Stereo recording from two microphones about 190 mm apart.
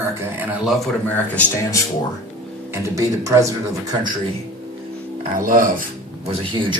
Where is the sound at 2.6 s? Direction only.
15° right (ahead or behind).